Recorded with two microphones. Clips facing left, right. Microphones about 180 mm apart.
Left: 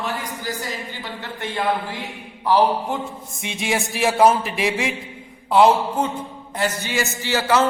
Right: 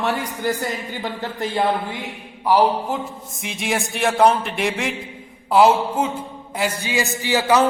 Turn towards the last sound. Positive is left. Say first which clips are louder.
# right 2 dB
turn(degrees=-15)  # may be behind; listen again after turning